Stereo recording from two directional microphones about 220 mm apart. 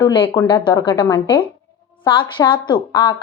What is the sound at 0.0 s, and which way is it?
A woman's voice, 20° left (ahead or behind).